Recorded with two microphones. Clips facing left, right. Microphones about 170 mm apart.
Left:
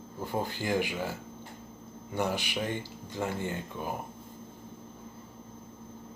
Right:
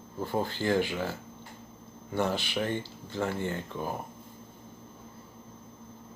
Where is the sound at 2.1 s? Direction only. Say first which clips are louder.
Right 2 dB; 15° left (ahead or behind).